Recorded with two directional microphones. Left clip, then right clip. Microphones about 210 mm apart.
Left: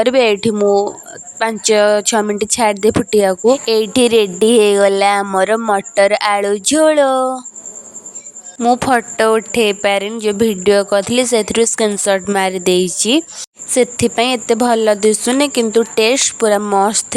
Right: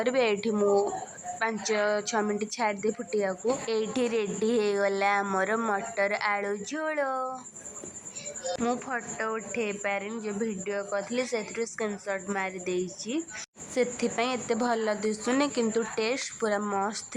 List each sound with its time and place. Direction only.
0.0 s a woman's voice: 45° left (ahead or behind)
8.7 s speech: 75° left (ahead or behind)
9.2 s a woman's voice: 55° left (ahead or behind)